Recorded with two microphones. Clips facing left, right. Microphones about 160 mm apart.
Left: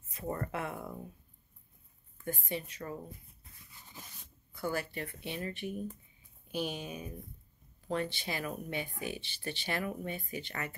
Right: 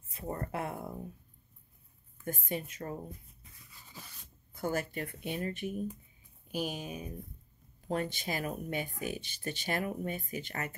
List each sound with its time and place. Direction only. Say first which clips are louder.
0.1 s speech: left 1 dB; 30° right (ahead or behind)
2.2 s speech: right 1 dB; 45° right (ahead or behind)
4.5 s speech: right 2 dB; 45° right (ahead or behind)